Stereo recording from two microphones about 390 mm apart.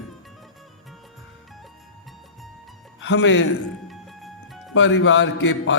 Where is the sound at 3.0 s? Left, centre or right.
Left.